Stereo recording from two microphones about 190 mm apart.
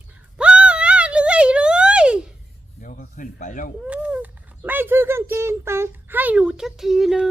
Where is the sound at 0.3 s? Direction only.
5° right (ahead or behind).